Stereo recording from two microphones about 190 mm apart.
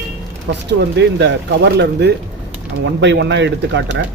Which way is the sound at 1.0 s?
70° right (ahead or behind).